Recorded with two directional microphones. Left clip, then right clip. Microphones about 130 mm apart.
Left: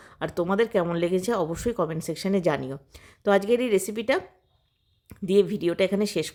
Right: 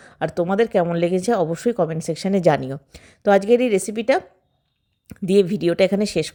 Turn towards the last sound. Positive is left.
turn(degrees=-25)  # may be behind; listen again after turning